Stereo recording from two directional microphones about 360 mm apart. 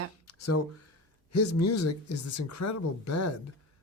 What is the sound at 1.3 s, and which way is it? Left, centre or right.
A man's voice, left.